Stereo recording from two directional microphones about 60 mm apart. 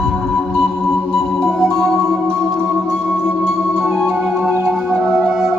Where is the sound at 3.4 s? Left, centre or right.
Centre.